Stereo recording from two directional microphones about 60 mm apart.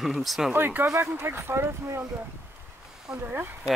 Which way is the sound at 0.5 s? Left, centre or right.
Right.